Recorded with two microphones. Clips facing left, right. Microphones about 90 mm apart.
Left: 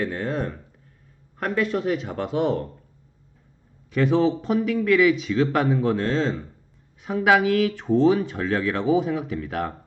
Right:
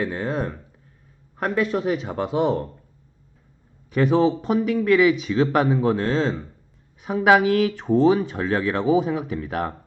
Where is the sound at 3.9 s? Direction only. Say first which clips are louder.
Right 2 dB; 40° right (ahead or behind).